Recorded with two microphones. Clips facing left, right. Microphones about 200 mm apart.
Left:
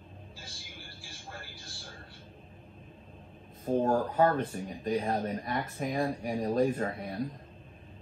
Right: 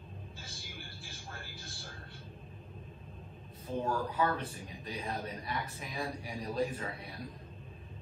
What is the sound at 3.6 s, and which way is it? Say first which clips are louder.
Speech: left 7 dB; 50° left (ahead or behind).